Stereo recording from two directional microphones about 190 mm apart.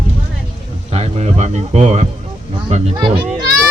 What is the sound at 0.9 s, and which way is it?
Speech, 35° right (ahead or behind).